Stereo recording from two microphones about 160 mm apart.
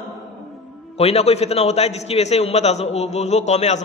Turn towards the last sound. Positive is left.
turn(degrees=45)  # may be behind; listen again after turning